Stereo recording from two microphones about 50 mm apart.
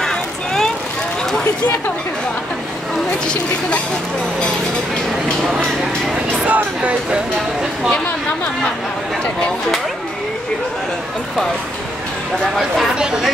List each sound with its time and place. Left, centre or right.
0.0 s vehicle: centre
6.4 s speech: right
12.9 s speech: centre